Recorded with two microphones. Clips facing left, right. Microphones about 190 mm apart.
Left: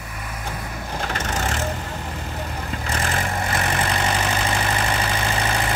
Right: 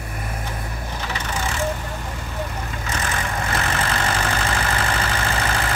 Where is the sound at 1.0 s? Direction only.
45° left (ahead or behind).